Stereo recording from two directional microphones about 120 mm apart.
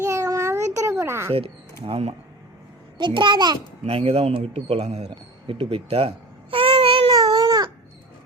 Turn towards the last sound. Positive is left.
turn(degrees=-35)  # may be behind; listen again after turning